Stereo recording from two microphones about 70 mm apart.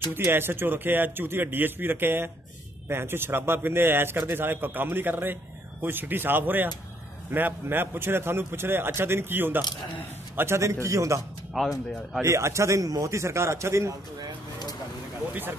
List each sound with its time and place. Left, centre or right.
0.1 s a man's voice: right
11.6 s speech: centre
12.2 s a man's voice: right